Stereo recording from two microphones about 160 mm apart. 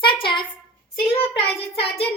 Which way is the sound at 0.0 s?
30° left (ahead or behind).